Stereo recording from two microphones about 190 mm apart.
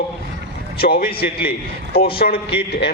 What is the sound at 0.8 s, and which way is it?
A man's voice, 50° left (ahead or behind).